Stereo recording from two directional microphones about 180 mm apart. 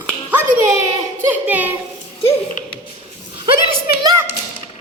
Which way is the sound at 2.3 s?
35° left (ahead or behind).